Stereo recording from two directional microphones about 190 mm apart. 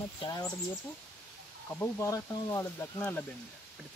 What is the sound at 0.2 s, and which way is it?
Speech, 20° left (ahead or behind).